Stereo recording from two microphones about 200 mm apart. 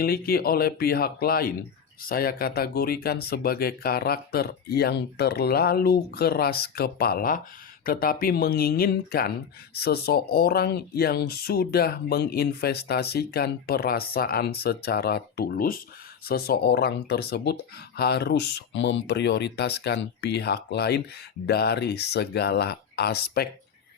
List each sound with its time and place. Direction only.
0.0 s speech: 50° left (ahead or behind)